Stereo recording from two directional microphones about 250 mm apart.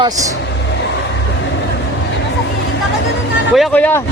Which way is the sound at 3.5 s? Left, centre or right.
Centre.